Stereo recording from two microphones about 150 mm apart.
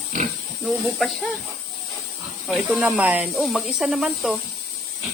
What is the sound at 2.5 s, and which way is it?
Speech, 5° right (ahead or behind).